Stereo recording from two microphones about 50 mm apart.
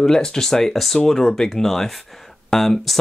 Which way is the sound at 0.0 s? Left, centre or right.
Centre.